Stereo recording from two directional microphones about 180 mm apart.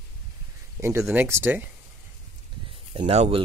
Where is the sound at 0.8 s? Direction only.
15° right (ahead or behind).